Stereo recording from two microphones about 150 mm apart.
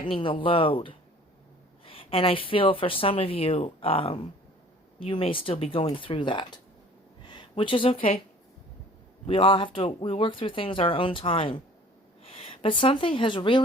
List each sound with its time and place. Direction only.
0.1 s speech: 35° left (ahead or behind)
9.2 s speech: 35° left (ahead or behind)